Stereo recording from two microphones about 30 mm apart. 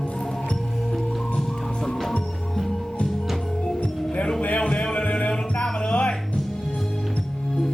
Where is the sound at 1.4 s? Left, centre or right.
Centre.